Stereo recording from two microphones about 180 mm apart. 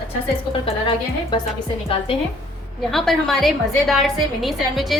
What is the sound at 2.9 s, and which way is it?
A woman's voice, centre (ahead or behind).